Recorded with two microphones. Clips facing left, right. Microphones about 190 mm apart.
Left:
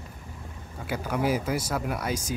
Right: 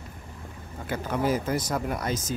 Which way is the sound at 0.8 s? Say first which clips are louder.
Even; 10° left (ahead or behind).